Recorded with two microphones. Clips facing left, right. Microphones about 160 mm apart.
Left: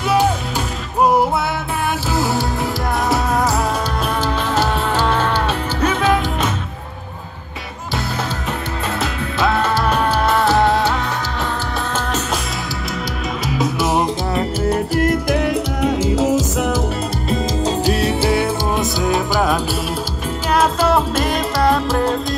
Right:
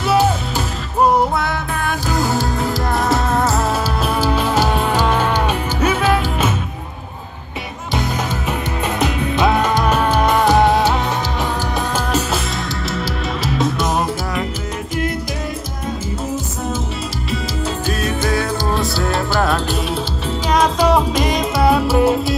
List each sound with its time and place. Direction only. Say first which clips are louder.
2.1 s music: right 1 dB; centre (ahead or behind)
9.0 s music: right 4 dB; 15° right (ahead or behind)
13.5 s music: even; centre (ahead or behind)
14.7 s music: left 6 dB; 50° left (ahead or behind)
15.8 s music: left 8 dB; 85° left
17.3 s music: left 4 dB; 35° left (ahead or behind)
18.7 s music: left 1 dB; 15° left (ahead or behind)
20.9 s music: right 1 dB; 5° left (ahead or behind)